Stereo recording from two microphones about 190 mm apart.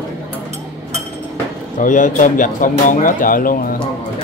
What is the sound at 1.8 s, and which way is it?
Speech, 40° left (ahead or behind).